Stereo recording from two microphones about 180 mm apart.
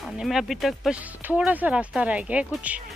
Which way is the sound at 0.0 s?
Centre (ahead or behind).